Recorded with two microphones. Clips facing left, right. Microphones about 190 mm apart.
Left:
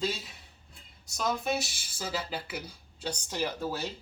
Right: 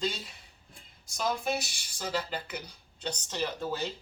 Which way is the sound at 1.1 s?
Centre (ahead or behind).